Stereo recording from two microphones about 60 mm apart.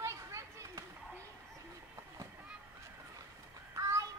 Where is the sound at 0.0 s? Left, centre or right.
Right.